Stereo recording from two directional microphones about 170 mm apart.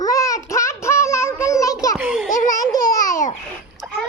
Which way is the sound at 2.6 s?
20° left (ahead or behind).